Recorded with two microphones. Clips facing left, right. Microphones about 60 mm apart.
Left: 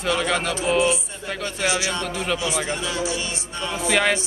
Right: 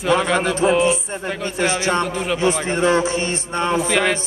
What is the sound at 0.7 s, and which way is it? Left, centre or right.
Speech, centre.